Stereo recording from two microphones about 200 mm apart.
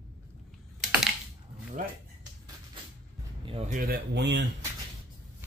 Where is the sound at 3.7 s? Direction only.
45° right (ahead or behind).